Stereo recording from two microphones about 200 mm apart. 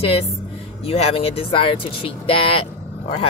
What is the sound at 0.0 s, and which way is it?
Speech, 30° left (ahead or behind).